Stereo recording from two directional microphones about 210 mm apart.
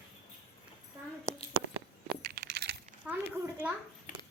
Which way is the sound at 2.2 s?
45° right (ahead or behind).